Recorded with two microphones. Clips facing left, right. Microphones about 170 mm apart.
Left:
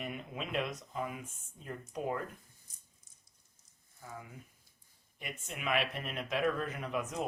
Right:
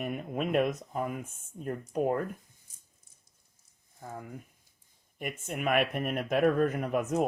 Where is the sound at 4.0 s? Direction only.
50° right (ahead or behind).